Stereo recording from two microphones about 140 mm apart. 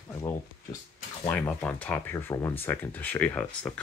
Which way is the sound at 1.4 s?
10° left (ahead or behind).